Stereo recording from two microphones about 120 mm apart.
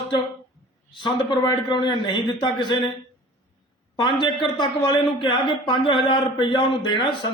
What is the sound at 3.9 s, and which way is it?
Speech, 40° left (ahead or behind).